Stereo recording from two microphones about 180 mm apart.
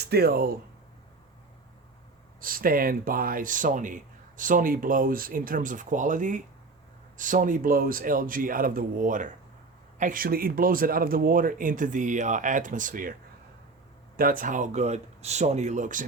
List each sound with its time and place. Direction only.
0.0 s speech: 60° right (ahead or behind)
2.4 s speech: 50° right (ahead or behind)
14.2 s speech: 50° right (ahead or behind)